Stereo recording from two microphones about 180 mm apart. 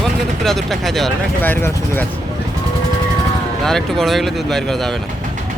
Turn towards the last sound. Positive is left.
turn(degrees=0)  # may be behind; listen again after turning